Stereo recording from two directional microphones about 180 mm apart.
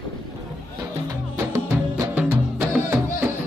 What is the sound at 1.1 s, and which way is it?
Music, 15° right (ahead or behind).